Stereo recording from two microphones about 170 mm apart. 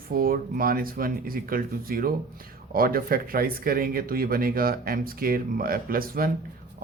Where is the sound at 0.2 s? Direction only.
55° right (ahead or behind).